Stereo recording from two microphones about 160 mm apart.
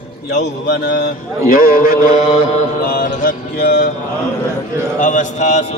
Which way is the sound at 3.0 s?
65° left (ahead or behind).